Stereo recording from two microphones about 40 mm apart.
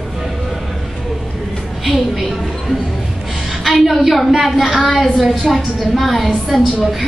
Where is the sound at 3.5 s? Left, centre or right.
Centre.